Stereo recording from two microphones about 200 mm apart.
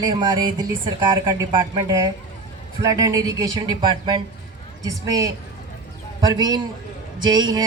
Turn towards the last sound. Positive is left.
turn(degrees=-20)  # may be behind; listen again after turning